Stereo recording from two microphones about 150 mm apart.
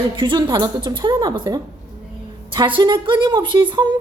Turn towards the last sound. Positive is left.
turn(degrees=-30)  # may be behind; listen again after turning